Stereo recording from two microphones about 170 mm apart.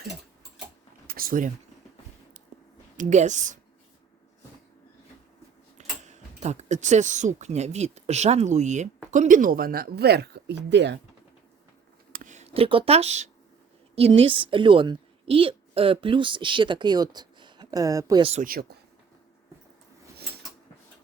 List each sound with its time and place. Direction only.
1.0 s a sound: 60° right (ahead or behind)
3.0 s speech: 45° right (ahead or behind)
6.4 s speech: 40° right (ahead or behind); by 11.0 s 90° right
12.1 s a sound: 45° right (ahead or behind)
13.9 s a woman's voice: 35° right (ahead or behind); by 18.2 s 20° right (ahead or behind)
18.2 s speech: 35° right (ahead or behind)
18.4 s speech: 60° right (ahead or behind)